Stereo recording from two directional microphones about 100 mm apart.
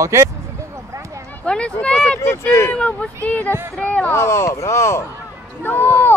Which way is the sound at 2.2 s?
25° left (ahead or behind).